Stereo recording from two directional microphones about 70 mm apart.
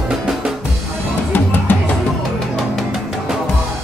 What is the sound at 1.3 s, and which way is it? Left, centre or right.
Music, left.